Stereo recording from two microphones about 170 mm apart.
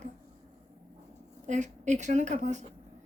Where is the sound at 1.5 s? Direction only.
45° right (ahead or behind).